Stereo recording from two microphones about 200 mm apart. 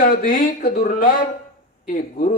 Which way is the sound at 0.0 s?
45° left (ahead or behind).